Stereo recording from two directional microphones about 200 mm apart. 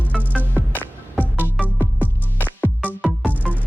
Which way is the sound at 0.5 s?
10° left (ahead or behind).